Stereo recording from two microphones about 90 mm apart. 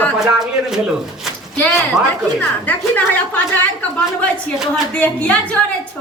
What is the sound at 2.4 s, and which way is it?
A woman's voice, 20° left (ahead or behind).